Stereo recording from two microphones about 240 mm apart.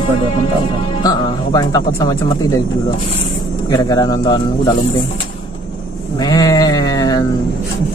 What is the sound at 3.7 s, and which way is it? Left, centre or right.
Speech, centre.